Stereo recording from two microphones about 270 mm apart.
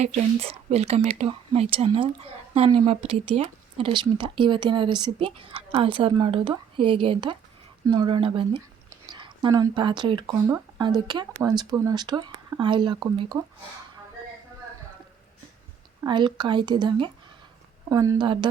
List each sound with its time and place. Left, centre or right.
0.0 s speech: right
16.0 s speech: centre